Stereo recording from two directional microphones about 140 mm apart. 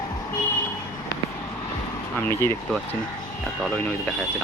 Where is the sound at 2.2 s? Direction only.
15° left (ahead or behind).